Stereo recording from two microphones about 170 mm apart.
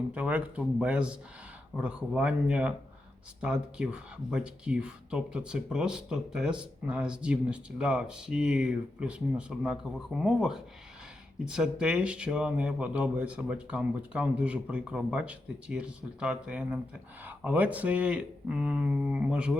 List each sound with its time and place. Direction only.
0.1 s speech: 10° right (ahead or behind)